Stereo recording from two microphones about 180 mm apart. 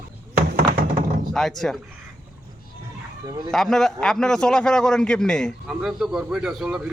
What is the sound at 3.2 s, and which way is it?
Speech, 20° right (ahead or behind).